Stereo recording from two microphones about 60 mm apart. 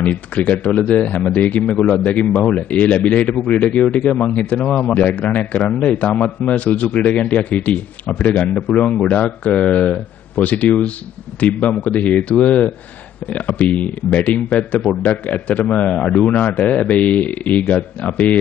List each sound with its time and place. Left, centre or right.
0.0 s a man's voice: left
1.6 s a man's voice: centre
2.2 s a man's voice: left